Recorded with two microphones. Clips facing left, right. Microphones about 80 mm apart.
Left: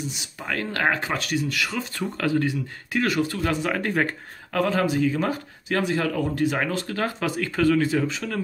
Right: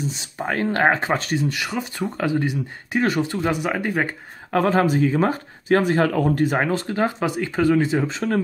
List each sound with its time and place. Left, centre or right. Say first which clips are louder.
0.0 s speech: right 6 dB; right; by 4.1 s centre
4.5 s speech: right 4 dB; right